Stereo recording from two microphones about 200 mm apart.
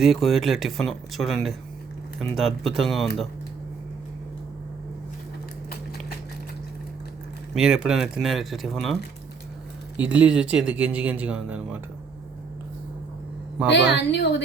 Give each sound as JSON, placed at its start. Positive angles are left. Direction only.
{"t": 0.0, "sound": "speech", "side_deg": 0}
{"t": 7.5, "sound": "speech", "side_deg": 0}
{"t": 10.0, "sound": "speech", "side_deg": -5}
{"t": 13.9, "sound": "a woman's voice", "side_deg": 60}